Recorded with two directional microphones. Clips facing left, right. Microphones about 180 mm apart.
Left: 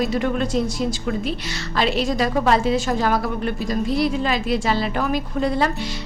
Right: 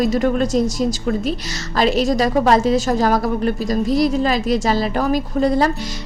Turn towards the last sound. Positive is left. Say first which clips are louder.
# right 4 dB
turn(degrees=-40)  # may be behind; listen again after turning